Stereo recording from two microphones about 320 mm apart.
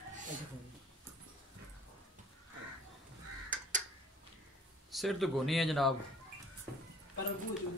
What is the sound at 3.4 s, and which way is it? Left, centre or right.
Crow, right.